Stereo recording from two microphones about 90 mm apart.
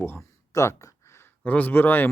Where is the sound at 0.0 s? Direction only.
25° left (ahead or behind).